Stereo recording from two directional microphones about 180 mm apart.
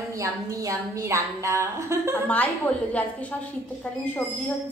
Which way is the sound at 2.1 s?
10° left (ahead or behind).